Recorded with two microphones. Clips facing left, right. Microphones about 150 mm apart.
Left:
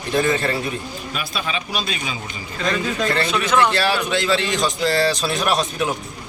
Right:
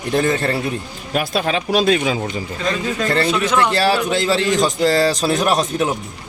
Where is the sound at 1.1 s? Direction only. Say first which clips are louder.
Right 9 dB; 65° right (ahead or behind).